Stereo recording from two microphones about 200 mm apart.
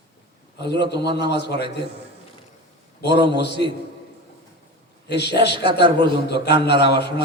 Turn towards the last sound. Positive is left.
turn(degrees=55)  # may be behind; listen again after turning